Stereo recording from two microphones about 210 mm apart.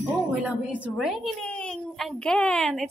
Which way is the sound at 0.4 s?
5° right (ahead or behind).